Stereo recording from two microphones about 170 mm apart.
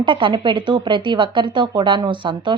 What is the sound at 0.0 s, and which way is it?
Speech, 30° right (ahead or behind).